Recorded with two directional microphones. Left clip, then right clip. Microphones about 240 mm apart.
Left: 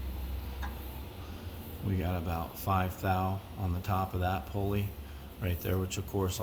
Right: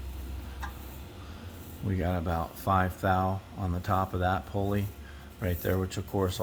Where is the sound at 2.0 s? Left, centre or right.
Right.